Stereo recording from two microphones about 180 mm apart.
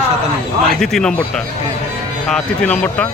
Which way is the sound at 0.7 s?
Centre (ahead or behind).